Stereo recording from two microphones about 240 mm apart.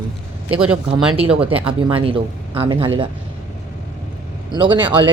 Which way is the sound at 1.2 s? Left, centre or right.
Right.